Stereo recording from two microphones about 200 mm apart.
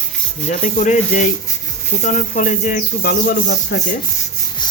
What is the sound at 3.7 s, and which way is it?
Rub, 55° left (ahead or behind).